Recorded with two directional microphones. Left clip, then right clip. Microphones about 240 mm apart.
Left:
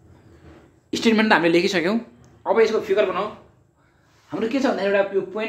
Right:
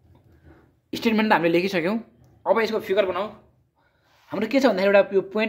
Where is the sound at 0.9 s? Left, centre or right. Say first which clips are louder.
Left 3 dB; right.